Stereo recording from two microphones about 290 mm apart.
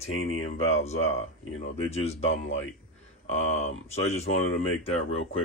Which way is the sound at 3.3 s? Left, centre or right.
Left.